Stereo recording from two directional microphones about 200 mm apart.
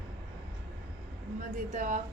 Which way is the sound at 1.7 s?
40° right (ahead or behind).